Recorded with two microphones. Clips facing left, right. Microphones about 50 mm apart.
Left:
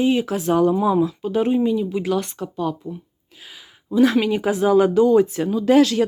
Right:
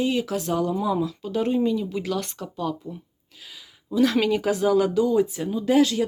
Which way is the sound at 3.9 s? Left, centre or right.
Left.